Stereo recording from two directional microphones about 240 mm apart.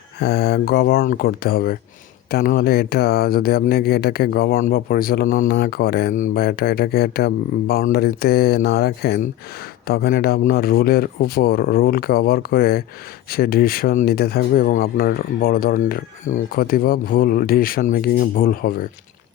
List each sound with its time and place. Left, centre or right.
0.2 s speech: left